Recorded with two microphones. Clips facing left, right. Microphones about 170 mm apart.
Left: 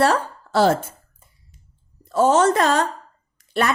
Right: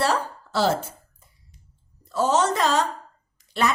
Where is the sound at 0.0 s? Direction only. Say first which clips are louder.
Left 5 dB; 55° left (ahead or behind).